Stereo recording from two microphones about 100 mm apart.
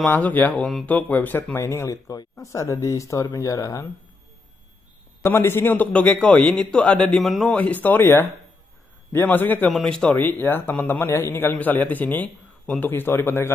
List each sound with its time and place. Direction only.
0.1 s a man's voice: 20° left (ahead or behind); by 3.8 s 35° left (ahead or behind)
5.2 s a man's voice: 25° left (ahead or behind); by 7.4 s centre (ahead or behind)
7.4 s a man's voice: 15° left (ahead or behind)
9.7 s speech: 5° left (ahead or behind)
10.1 s a man's voice: 20° left (ahead or behind)